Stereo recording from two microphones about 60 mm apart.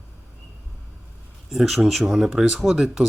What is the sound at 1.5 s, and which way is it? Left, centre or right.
Speech, centre.